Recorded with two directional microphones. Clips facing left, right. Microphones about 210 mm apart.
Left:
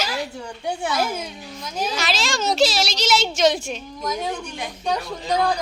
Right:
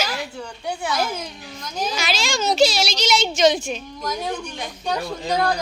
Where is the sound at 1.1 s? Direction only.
5° left (ahead or behind).